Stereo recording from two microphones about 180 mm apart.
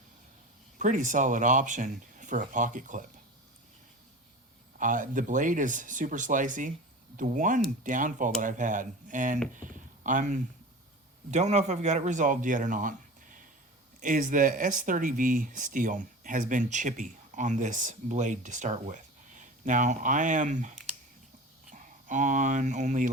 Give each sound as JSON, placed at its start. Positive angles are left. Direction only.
{"t": 0.8, "sound": "speech", "side_deg": -45}
{"t": 4.8, "sound": "speech", "side_deg": -45}